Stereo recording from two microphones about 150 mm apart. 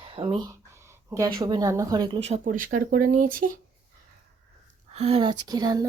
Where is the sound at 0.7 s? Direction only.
15° right (ahead or behind).